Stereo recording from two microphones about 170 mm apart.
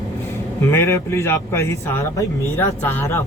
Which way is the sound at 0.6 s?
15° left (ahead or behind).